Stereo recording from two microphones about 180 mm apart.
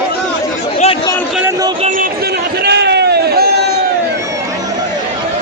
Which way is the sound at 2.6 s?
70° right (ahead or behind).